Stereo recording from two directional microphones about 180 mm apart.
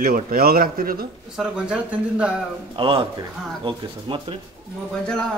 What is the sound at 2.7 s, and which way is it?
Speech, 30° right (ahead or behind).